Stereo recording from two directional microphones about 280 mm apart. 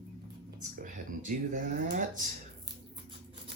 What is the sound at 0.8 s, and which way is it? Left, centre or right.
Speech, right.